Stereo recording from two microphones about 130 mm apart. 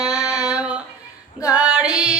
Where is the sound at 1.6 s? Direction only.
5° right (ahead or behind).